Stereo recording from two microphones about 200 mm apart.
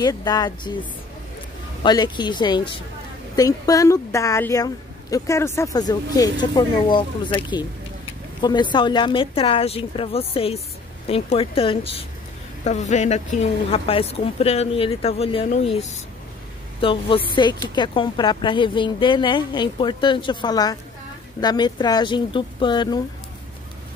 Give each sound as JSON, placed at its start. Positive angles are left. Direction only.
{"t": 0.0, "sound": "speech", "side_deg": 20}
{"t": 1.8, "sound": "a woman's voice", "side_deg": 20}